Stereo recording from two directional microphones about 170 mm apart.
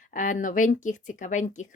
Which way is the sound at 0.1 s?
50° left (ahead or behind).